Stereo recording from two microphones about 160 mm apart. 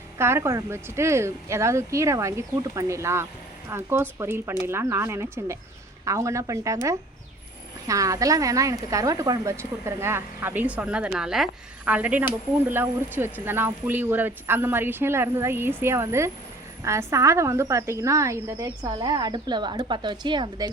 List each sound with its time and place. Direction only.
0.2 s a woman's voice: 15° right (ahead or behind)
7.9 s a woman's voice: 20° right (ahead or behind)